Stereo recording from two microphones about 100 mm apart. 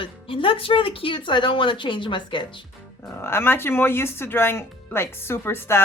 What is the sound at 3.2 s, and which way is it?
Speech, 25° left (ahead or behind).